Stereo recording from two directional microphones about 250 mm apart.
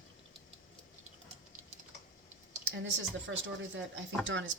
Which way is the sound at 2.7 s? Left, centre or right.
Right.